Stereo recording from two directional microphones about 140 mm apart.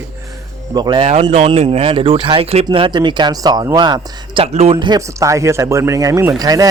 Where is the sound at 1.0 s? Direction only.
50° right (ahead or behind).